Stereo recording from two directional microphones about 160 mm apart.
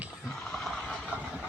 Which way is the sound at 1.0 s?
10° right (ahead or behind).